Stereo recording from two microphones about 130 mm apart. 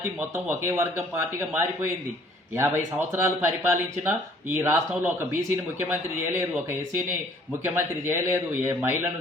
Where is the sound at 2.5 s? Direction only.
15° right (ahead or behind).